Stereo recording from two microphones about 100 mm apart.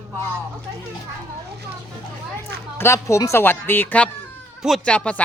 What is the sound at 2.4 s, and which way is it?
Speech, 25° left (ahead or behind).